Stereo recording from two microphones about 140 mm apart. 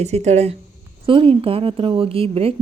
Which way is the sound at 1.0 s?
40° right (ahead or behind).